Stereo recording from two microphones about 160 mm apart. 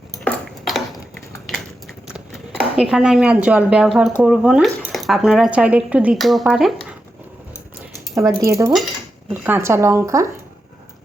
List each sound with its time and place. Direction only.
0.3 s ping: centre (ahead or behind)
1.5 s biting: centre (ahead or behind)
2.0 s speech: 5° right (ahead or behind)
8.1 s speech: 20° right (ahead or behind)